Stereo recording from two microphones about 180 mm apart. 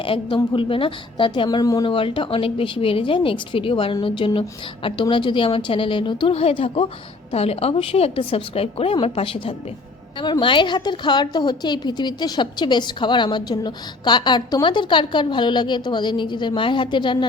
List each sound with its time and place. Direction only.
0.0 s a woman's voice: 30° left (ahead or behind)